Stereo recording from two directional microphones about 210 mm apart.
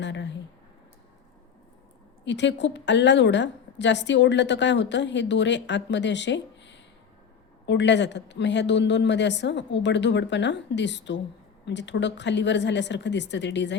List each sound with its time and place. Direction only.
0.0 s a woman's voice: 55° left (ahead or behind)
2.2 s a woman's voice: 55° left (ahead or behind)